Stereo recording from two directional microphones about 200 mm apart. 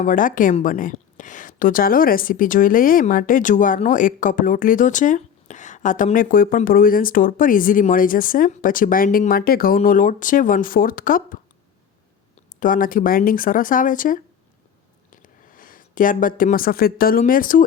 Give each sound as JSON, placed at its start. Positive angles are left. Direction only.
{"t": 0.0, "sound": "a woman's voice", "side_deg": 45}
{"t": 12.5, "sound": "a woman's voice", "side_deg": 45}